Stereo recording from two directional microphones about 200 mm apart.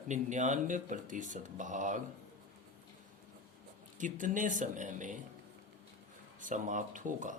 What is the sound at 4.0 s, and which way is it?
Speech, 40° right (ahead or behind).